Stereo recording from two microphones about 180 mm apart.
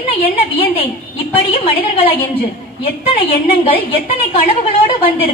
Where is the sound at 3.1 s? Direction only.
30° left (ahead or behind).